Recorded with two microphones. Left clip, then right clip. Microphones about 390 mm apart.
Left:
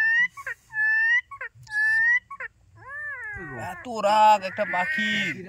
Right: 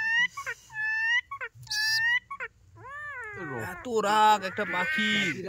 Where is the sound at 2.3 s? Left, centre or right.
Centre.